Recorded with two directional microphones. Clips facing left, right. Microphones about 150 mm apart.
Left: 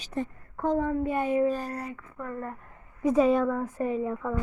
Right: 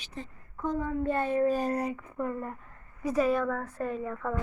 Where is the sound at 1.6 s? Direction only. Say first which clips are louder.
Right 5 dB; 20° right (ahead or behind).